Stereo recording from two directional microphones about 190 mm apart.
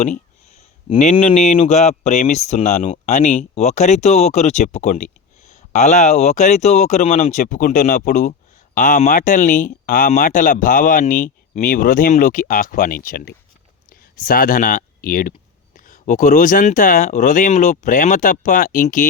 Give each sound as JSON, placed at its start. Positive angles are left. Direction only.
{"t": 1.1, "sound": "speech", "side_deg": 35}